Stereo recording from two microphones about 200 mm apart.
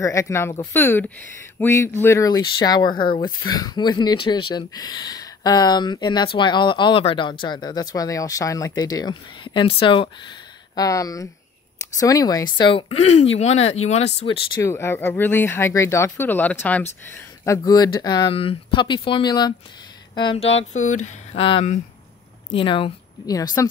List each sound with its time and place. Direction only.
0.0 s speech: 15° left (ahead or behind)